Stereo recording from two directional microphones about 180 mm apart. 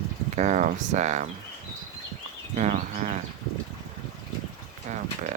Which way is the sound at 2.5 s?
40° right (ahead or behind).